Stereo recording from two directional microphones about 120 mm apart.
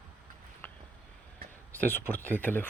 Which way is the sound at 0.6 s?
15° left (ahead or behind).